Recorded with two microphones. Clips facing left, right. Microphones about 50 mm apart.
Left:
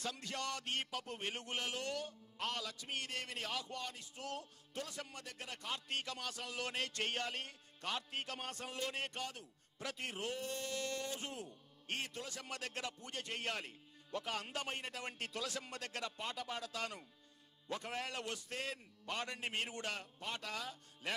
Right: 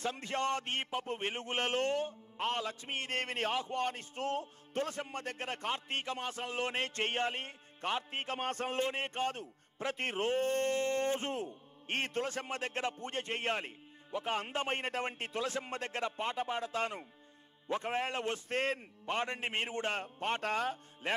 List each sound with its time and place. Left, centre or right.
0.0 s a man's voice: right
8.8 s a man's voice: right